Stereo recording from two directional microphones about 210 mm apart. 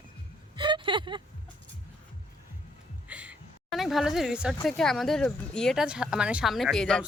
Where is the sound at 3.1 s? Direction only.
5° right (ahead or behind).